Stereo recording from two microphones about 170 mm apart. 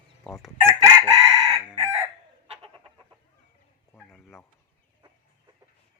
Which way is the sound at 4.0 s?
5° left (ahead or behind).